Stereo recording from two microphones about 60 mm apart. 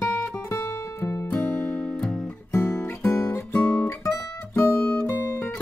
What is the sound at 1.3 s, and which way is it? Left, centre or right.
Music, left.